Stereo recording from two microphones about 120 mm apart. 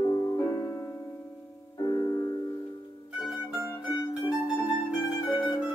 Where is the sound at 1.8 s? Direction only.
35° left (ahead or behind).